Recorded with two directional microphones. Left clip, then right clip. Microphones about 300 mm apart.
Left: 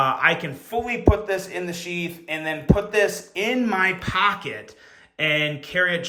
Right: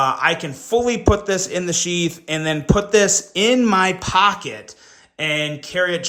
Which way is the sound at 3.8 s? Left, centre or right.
Centre.